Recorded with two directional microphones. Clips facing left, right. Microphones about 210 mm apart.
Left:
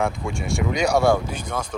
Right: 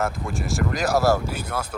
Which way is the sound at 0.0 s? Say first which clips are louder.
Left 2 dB; centre (ahead or behind).